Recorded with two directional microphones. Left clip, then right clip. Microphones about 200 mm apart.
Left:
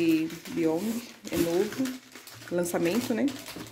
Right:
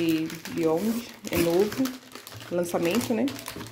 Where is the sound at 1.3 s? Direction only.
55° right (ahead or behind).